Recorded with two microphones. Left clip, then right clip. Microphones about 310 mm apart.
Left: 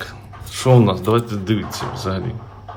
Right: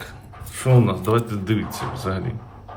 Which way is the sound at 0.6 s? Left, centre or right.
Centre.